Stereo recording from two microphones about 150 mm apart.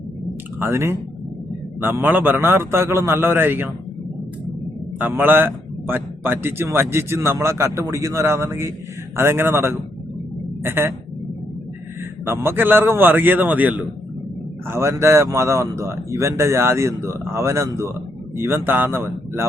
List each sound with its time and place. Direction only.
0.6 s a man's voice: 15° right (ahead or behind)
4.9 s a man's voice: 10° right (ahead or behind)
12.2 s a man's voice: 15° right (ahead or behind)